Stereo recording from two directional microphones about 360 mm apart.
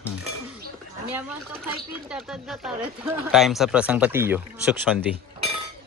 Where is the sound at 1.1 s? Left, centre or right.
Centre.